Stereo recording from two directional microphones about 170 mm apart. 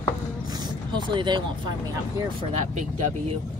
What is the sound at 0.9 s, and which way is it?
Speech, 25° right (ahead or behind).